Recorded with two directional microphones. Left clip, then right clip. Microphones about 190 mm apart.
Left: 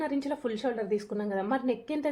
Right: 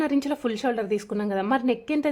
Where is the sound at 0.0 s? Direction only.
45° right (ahead or behind).